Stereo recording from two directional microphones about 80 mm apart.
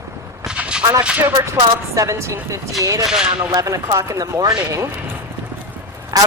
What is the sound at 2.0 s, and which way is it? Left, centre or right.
A woman's voice, right.